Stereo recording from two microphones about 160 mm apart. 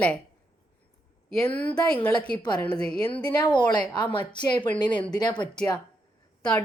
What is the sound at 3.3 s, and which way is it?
Speech, 25° left (ahead or behind).